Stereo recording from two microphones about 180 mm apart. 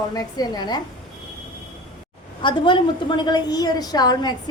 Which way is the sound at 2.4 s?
25° left (ahead or behind).